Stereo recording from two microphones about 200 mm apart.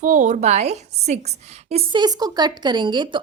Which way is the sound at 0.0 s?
35° right (ahead or behind).